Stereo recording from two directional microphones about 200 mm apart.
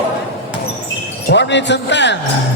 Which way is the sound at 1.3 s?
60° left (ahead or behind).